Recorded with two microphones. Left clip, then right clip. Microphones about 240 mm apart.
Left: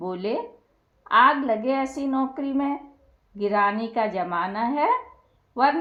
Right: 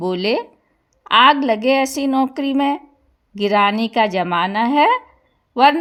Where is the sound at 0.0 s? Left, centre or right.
Right.